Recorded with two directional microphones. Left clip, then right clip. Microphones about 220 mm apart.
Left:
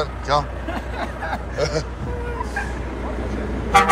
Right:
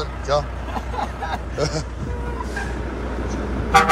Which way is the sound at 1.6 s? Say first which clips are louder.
Left 2 dB; 20° right (ahead or behind).